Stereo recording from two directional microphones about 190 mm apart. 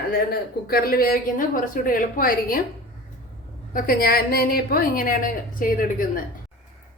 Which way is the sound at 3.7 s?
50° left (ahead or behind).